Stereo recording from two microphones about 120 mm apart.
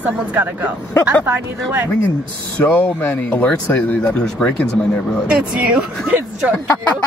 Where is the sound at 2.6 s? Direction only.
15° left (ahead or behind).